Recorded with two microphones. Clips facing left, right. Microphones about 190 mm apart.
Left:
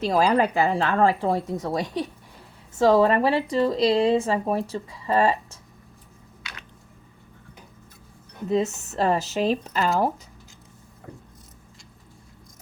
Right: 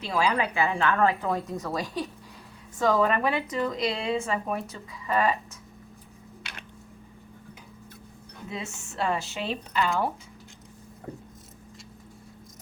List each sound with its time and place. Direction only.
0.0 s speech: 40° left (ahead or behind)
8.4 s speech: 40° left (ahead or behind)